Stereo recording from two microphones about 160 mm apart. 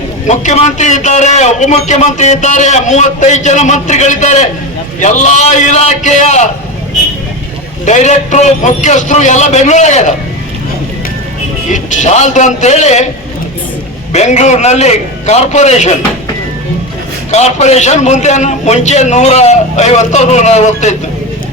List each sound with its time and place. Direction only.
0.3 s a man's voice: 45° left (ahead or behind)
7.9 s a man's voice: 50° left (ahead or behind)
11.7 s a man's voice: 50° left (ahead or behind)
14.1 s a man's voice: 45° left (ahead or behind)
17.3 s a man's voice: 45° left (ahead or behind)